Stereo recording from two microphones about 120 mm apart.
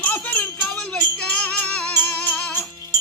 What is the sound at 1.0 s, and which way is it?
Music, 10° left (ahead or behind).